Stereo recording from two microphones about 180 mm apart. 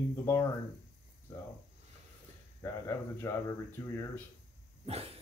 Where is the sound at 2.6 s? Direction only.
15° left (ahead or behind).